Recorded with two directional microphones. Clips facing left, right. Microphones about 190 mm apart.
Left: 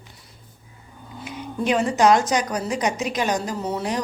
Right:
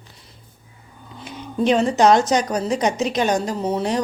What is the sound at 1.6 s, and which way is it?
A woman's voice, 25° right (ahead or behind).